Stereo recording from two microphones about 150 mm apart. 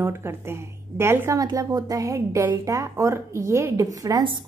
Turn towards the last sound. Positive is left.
turn(degrees=-30)  # may be behind; listen again after turning